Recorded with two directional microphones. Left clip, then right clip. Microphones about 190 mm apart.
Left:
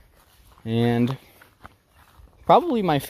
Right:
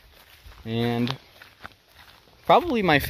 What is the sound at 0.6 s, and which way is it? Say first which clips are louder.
Speech: left 4 dB; 40° left (ahead or behind).